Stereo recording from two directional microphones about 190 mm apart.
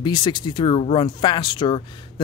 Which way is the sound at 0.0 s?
25° left (ahead or behind).